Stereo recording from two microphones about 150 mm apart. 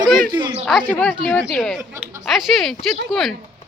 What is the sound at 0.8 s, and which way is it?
A woman's voice, 10° left (ahead or behind).